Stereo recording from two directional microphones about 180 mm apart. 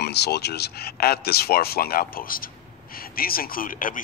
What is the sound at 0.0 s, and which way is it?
Speech, 65° left (ahead or behind).